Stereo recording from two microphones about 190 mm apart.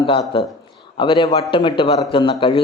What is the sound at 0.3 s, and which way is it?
Speech, 30° left (ahead or behind).